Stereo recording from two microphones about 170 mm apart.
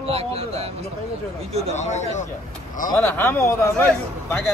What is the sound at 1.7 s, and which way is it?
Speech, 40° left (ahead or behind).